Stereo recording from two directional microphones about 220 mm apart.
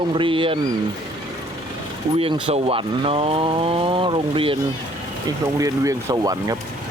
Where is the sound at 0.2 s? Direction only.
25° right (ahead or behind).